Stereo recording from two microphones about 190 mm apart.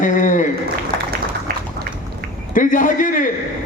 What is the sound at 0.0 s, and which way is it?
Applause, 45° left (ahead or behind).